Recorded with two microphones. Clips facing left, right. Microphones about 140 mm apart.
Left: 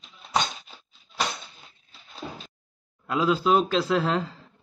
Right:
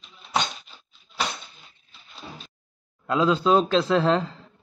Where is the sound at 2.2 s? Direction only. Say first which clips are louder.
Left 3 dB; 75° left (ahead or behind).